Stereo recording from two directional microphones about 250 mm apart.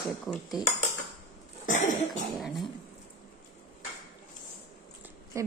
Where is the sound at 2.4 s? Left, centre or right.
Centre.